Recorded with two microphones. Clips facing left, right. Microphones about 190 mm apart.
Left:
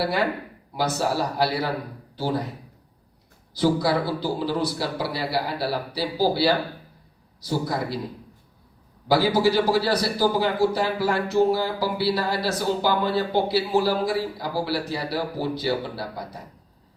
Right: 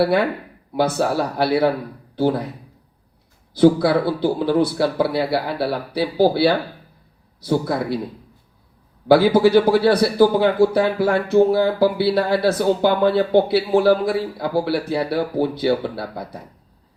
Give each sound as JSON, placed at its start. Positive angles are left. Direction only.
{"t": 0.8, "sound": "a man's voice", "side_deg": -55}
{"t": 3.5, "sound": "a man's voice", "side_deg": -60}
{"t": 9.0, "sound": "a man's voice", "side_deg": -55}